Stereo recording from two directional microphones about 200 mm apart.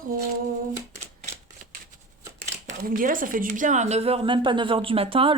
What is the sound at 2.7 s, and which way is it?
Speech, 45° right (ahead or behind).